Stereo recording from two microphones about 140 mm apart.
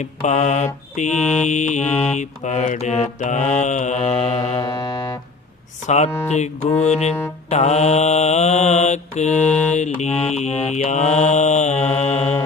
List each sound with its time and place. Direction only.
0.0 s mantra: 55° left (ahead or behind)
1.2 s mantra: 5° left (ahead or behind)
1.5 s mantra: 60° left (ahead or behind)
4.5 s music: 30° left (ahead or behind)
5.8 s mantra: 55° left (ahead or behind)